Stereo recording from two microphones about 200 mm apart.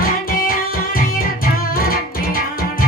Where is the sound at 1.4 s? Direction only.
45° left (ahead or behind).